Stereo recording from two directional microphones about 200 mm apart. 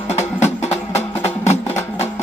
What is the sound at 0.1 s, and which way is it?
Music, 35° left (ahead or behind).